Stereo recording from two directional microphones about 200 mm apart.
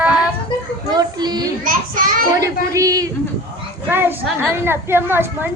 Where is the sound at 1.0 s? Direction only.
20° right (ahead or behind).